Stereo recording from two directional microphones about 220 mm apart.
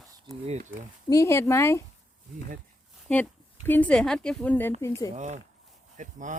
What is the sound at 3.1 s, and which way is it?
A woman's voice, 5° left (ahead or behind).